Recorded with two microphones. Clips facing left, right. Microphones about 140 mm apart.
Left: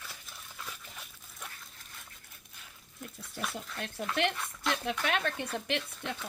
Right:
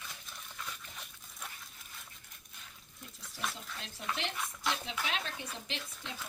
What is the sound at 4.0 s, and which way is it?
Speech, 55° left (ahead or behind).